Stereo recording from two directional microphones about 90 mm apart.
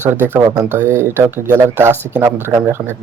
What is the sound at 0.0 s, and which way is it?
Speech, 25° right (ahead or behind).